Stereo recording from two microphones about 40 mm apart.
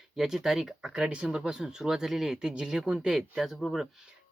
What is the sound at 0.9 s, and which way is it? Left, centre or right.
Speech, right.